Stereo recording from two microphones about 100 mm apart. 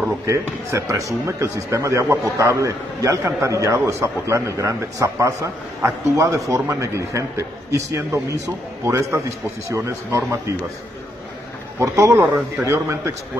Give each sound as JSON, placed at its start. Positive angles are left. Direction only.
{"t": 0.3, "sound": "a man's voice", "side_deg": -30}
{"t": 11.8, "sound": "speech", "side_deg": -30}